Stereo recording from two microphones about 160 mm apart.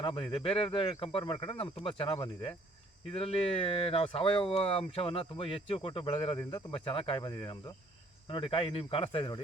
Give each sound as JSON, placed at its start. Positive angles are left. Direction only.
{"t": 0.0, "sound": "speech", "side_deg": 30}